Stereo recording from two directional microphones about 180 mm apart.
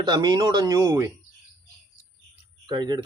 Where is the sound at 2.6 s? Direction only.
25° right (ahead or behind).